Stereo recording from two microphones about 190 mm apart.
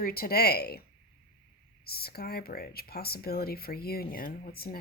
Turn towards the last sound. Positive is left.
turn(degrees=50)  # may be behind; listen again after turning